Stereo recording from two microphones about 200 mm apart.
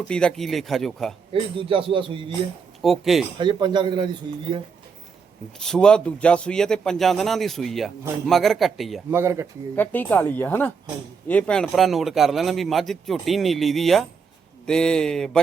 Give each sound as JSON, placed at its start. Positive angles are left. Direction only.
{"t": 0.1, "sound": "speech", "side_deg": 5}
{"t": 1.3, "sound": "speech", "side_deg": -25}
{"t": 2.8, "sound": "speech", "side_deg": 0}
{"t": 3.3, "sound": "speech", "side_deg": -25}
{"t": 5.5, "sound": "speech", "side_deg": 5}
{"t": 9.0, "sound": "speech", "side_deg": -10}
{"t": 9.7, "sound": "speech", "side_deg": 10}